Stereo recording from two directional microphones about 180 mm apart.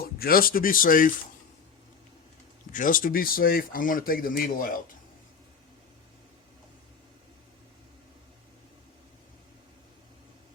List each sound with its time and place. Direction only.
0.0 s speech: 55° left (ahead or behind)
2.7 s speech: 50° left (ahead or behind)